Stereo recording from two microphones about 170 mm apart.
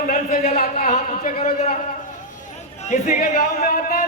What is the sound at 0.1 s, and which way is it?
A man's voice, 45° left (ahead or behind).